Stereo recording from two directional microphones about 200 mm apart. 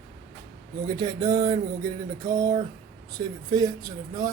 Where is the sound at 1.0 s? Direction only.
20° right (ahead or behind).